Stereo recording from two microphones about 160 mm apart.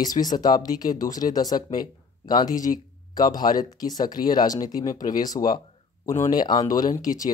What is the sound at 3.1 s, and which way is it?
Speech, 25° left (ahead or behind).